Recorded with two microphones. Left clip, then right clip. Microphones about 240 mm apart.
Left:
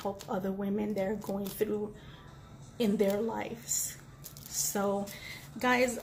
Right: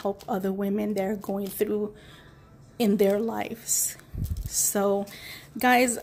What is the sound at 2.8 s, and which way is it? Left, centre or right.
A woman's voice, right.